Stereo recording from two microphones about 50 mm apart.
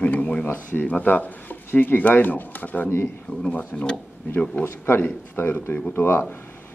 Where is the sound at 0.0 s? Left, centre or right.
Left.